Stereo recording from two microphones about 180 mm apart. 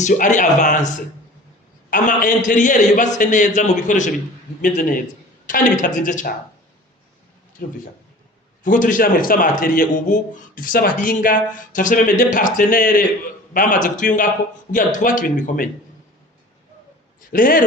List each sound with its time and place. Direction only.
0.0 s a man's voice: 45° left (ahead or behind)
8.6 s a man's voice: 45° left (ahead or behind)
17.3 s a man's voice: 50° left (ahead or behind)